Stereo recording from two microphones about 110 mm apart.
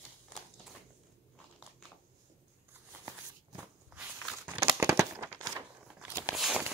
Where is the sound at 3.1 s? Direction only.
15° right (ahead or behind).